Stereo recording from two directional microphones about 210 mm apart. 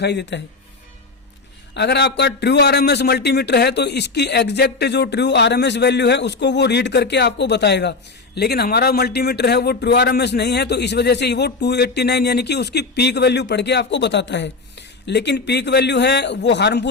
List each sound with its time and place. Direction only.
0.0 s speech: 55° left (ahead or behind)
1.7 s speech: 55° left (ahead or behind)